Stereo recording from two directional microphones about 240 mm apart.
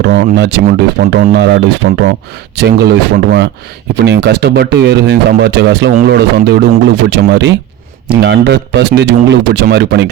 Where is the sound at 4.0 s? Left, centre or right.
Right.